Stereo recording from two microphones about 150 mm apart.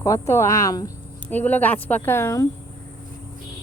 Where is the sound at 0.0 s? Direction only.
20° left (ahead or behind).